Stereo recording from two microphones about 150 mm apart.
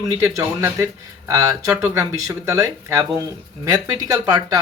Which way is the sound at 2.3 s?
25° right (ahead or behind).